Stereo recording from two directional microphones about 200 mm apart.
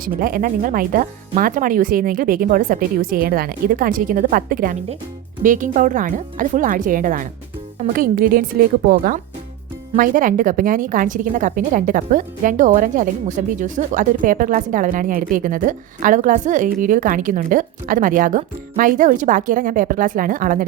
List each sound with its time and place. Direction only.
0.0 s speech: 45° right (ahead or behind)